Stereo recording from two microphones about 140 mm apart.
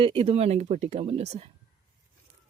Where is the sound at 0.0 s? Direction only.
40° right (ahead or behind).